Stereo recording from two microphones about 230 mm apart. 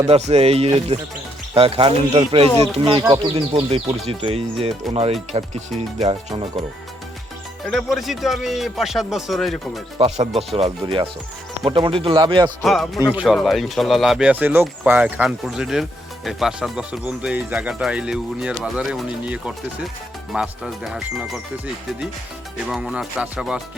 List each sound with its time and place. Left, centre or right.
0.1 s speech: right
7.7 s speech: centre
10.0 s speech: right
12.6 s speech: centre
22.7 s speech: centre